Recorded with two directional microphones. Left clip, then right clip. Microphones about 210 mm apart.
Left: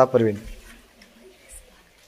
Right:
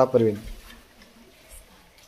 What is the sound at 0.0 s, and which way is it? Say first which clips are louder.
Speech: left 2 dB; 5° left (ahead or behind).